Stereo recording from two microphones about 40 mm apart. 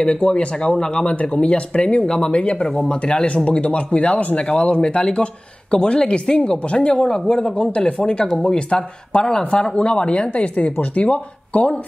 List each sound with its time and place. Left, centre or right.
0.0 s speech: left
1.0 s speech: left
3.4 s speech: left